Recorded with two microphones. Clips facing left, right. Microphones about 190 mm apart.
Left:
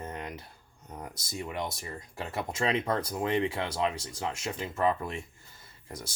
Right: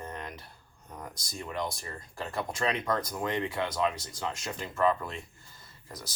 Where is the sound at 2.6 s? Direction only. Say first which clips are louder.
Left 2 dB; 25° left (ahead or behind).